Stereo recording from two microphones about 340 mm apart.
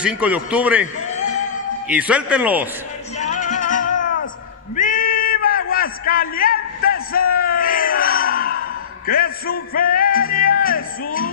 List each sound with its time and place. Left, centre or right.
0.0 s a man's voice: centre
1.1 s music: left
1.9 s a man's voice: centre
3.2 s music: left
4.7 s a sound: left